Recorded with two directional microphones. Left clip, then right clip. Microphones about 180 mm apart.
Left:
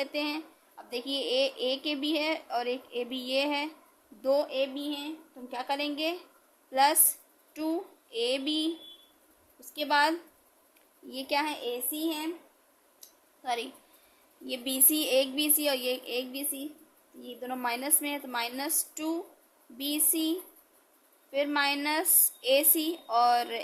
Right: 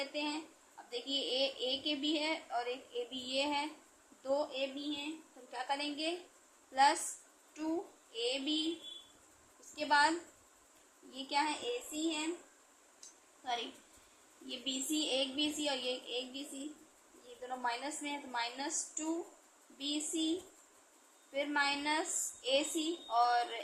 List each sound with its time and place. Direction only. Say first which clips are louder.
0.0 s a sound: left 7 dB; 90° left
0.9 s a woman's voice: left 6 dB; 90° left
9.7 s a woman's voice: left 4 dB; 90° left
13.0 s a sound: left 6 dB; 90° left
14.4 s a woman's voice: left 7 dB; 90° left
17.5 s a woman's voice: left 6 dB; 90° left
21.3 s a woman's voice: left 6 dB; 90° left